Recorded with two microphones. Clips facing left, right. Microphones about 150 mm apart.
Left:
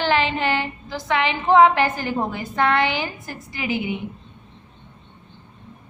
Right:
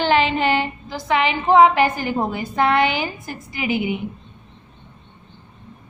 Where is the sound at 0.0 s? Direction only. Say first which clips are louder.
Right 3 dB; 20° right (ahead or behind).